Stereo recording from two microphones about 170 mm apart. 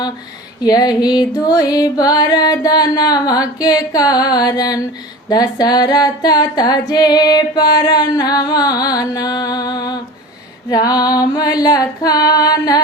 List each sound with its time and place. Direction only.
0.6 s music: 25° left (ahead or behind)